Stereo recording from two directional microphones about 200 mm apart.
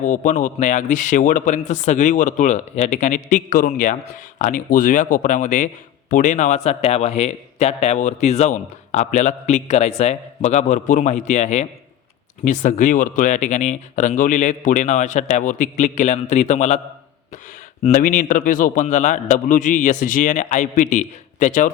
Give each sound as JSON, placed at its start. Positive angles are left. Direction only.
{"t": 0.0, "sound": "a man's voice", "side_deg": 40}
{"t": 17.8, "sound": "a man's voice", "side_deg": 40}